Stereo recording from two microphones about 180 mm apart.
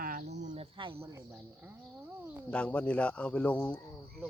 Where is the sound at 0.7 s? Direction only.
30° right (ahead or behind).